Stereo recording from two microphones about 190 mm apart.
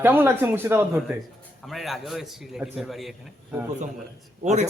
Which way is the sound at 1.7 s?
Centre (ahead or behind).